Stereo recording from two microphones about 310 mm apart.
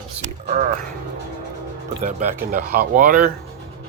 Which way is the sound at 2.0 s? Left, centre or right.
Right.